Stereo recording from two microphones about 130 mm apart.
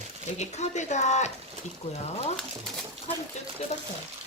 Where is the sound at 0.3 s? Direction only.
60° left (ahead or behind).